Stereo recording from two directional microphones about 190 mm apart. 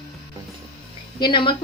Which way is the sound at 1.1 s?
25° left (ahead or behind).